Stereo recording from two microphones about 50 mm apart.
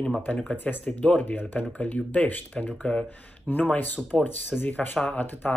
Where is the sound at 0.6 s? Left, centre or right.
Left; by 3.0 s centre.